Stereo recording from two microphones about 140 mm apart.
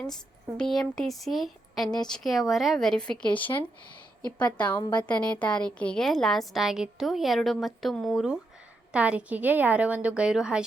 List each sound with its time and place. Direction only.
0.5 s a woman's voice: 5° left (ahead or behind)
4.5 s a woman's voice: 10° left (ahead or behind)
4.8 s a woman's voice: 30° left (ahead or behind)
5.0 s a woman's voice: 10° left (ahead or behind)